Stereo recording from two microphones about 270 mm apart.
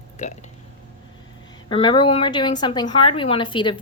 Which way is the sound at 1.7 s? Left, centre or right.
Centre.